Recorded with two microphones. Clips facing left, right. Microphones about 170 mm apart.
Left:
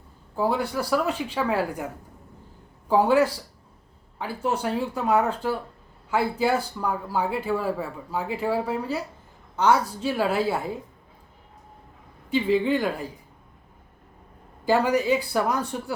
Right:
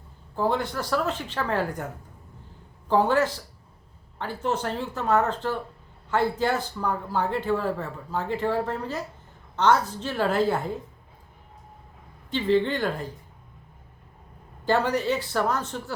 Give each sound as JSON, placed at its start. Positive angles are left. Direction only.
{"t": 0.3, "sound": "a man's voice", "side_deg": 10}
{"t": 2.9, "sound": "a man's voice", "side_deg": 10}
{"t": 12.3, "sound": "a man's voice", "side_deg": 10}
{"t": 14.6, "sound": "a man's voice", "side_deg": 10}